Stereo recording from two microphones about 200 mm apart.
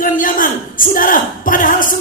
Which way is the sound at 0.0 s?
45° left (ahead or behind).